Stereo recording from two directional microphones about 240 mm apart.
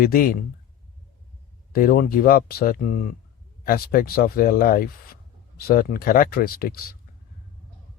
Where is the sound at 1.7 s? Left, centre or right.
Left.